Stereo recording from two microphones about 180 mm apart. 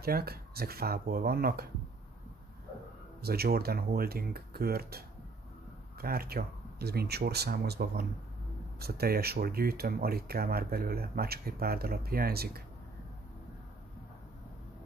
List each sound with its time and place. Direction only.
0.0 s speech: 60° right (ahead or behind)
3.2 s speech: 60° right (ahead or behind)